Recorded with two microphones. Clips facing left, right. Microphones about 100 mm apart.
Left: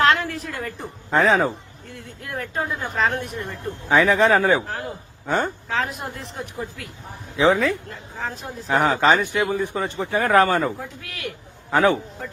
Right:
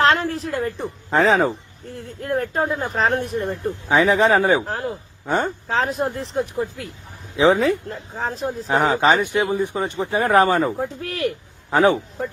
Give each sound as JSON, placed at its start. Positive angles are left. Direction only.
{"t": 0.0, "sound": "a woman's voice", "side_deg": -30}
{"t": 3.8, "sound": "a man's voice", "side_deg": -20}
{"t": 4.6, "sound": "a man's voice", "side_deg": -30}
{"t": 7.3, "sound": "speech", "side_deg": -20}
{"t": 7.9, "sound": "speech", "side_deg": -35}
{"t": 8.7, "sound": "a man's voice", "side_deg": -20}
{"t": 10.8, "sound": "speech", "side_deg": -40}
{"t": 11.7, "sound": "a man's voice", "side_deg": -20}